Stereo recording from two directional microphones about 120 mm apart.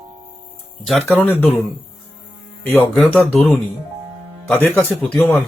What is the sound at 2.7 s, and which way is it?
Speech, 10° left (ahead or behind).